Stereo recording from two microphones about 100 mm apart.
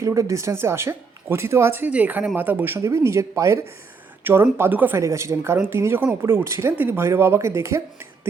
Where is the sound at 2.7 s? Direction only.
30° right (ahead or behind).